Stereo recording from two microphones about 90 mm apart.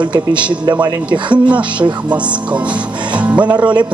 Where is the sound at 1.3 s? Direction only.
15° right (ahead or behind).